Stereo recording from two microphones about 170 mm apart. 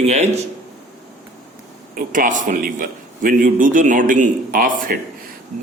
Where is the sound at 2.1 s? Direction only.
50° right (ahead or behind).